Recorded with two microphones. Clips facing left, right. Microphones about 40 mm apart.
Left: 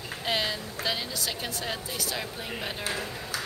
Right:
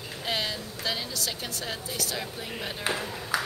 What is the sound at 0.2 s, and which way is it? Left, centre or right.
A woman's voice, centre.